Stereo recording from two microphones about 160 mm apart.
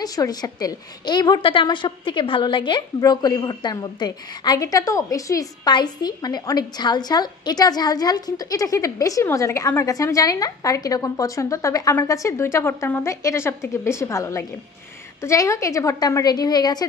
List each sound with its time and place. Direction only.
0.0 s a woman's voice: 25° left (ahead or behind)